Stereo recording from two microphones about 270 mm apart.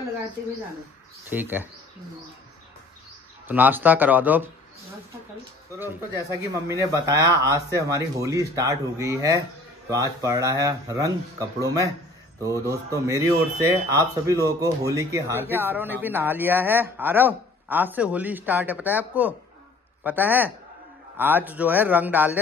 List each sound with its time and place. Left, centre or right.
1.3 s speech: centre
3.4 s speech: centre
6.7 s speech: centre